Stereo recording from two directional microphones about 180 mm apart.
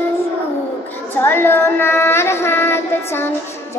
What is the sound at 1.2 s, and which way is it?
Child singing, 10° left (ahead or behind).